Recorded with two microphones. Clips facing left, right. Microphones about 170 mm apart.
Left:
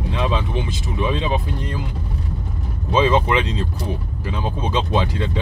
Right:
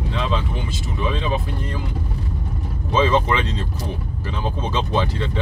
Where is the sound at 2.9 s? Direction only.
15° left (ahead or behind).